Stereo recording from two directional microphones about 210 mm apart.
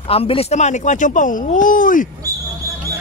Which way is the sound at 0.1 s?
25° left (ahead or behind).